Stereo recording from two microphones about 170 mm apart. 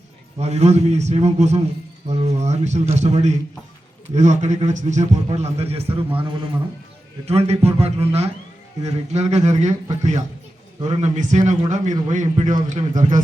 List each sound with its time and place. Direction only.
0.3 s a man's voice: 40° right (ahead or behind)